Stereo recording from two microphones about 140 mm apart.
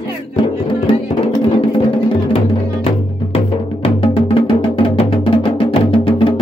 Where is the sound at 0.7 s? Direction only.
40° left (ahead or behind).